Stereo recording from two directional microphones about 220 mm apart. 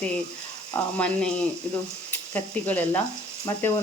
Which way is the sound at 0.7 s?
5° left (ahead or behind).